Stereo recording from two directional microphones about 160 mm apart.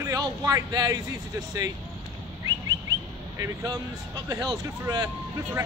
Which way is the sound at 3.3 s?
20° right (ahead or behind).